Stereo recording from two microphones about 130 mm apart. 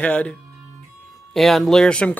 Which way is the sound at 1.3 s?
Centre (ahead or behind).